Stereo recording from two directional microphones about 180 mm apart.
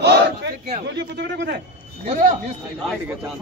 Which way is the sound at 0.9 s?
75° right (ahead or behind).